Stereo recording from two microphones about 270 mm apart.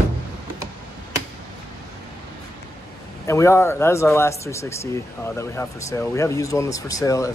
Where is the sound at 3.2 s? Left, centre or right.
Centre.